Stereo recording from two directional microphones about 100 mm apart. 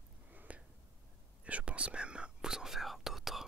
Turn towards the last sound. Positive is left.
turn(degrees=-5)  # may be behind; listen again after turning